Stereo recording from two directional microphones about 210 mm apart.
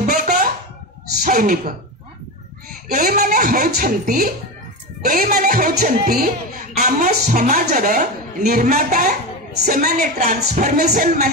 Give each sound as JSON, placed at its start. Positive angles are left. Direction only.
{"t": 0.0, "sound": "a sound", "side_deg": -40}
{"t": 1.2, "sound": "a woman's voice", "side_deg": -40}
{"t": 2.9, "sound": "a woman's voice", "side_deg": -40}